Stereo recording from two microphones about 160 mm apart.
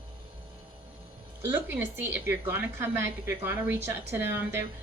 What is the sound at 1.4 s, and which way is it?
A woman's voice, 15° right (ahead or behind).